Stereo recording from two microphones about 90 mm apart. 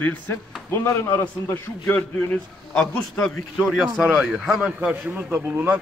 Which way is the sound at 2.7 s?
5° left (ahead or behind).